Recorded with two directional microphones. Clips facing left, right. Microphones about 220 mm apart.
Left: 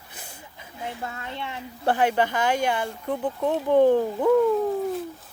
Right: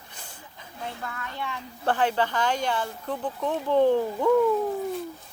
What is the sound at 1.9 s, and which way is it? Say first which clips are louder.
Speech: left 2 dB; 10° left (ahead or behind).